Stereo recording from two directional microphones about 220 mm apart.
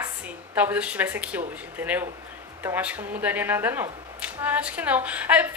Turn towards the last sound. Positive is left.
turn(degrees=-5)  # may be behind; listen again after turning